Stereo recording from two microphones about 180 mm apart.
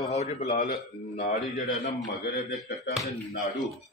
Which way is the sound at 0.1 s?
40° left (ahead or behind).